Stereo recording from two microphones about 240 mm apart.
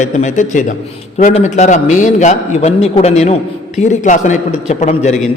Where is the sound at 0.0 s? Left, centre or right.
Left.